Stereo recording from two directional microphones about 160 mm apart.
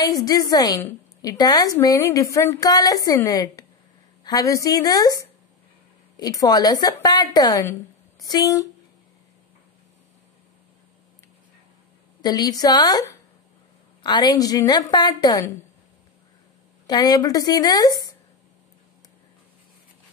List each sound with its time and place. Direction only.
0.0 s a woman's voice: 25° left (ahead or behind)
12.2 s a woman's voice: 25° left (ahead or behind)
16.8 s a woman's voice: 25° left (ahead or behind)